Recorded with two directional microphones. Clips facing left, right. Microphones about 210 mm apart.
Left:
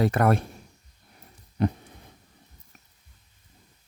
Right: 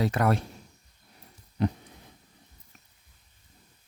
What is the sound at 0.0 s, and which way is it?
Speech, 55° left (ahead or behind).